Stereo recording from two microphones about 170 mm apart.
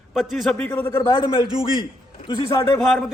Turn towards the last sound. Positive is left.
turn(degrees=0)  # may be behind; listen again after turning